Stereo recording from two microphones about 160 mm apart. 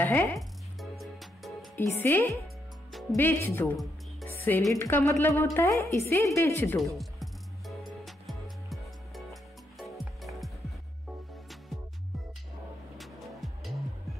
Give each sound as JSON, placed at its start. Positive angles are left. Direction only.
{"t": 0.0, "sound": "a woman's voice", "side_deg": 10}
{"t": 0.4, "sound": "music", "side_deg": 0}
{"t": 1.8, "sound": "a woman's voice", "side_deg": 15}
{"t": 2.9, "sound": "music", "side_deg": 0}
{"t": 3.2, "sound": "a woman's voice", "side_deg": 10}
{"t": 4.4, "sound": "music", "side_deg": 10}
{"t": 4.7, "sound": "a woman's voice", "side_deg": 15}
{"t": 7.0, "sound": "music", "side_deg": 0}
{"t": 12.9, "sound": "music", "side_deg": 0}